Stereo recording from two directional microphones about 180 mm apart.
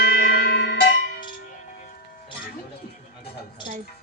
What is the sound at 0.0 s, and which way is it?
Music, 60° left (ahead or behind).